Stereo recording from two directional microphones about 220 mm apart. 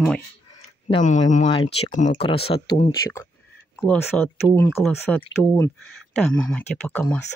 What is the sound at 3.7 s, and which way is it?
Speech, centre (ahead or behind).